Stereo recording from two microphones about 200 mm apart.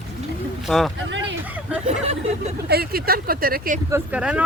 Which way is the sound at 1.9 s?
30° right (ahead or behind).